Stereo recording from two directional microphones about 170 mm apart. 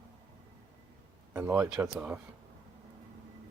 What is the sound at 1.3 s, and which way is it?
Speech, 10° right (ahead or behind).